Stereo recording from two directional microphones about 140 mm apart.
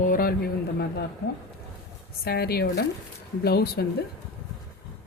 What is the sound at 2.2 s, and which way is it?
Speech, 90° left.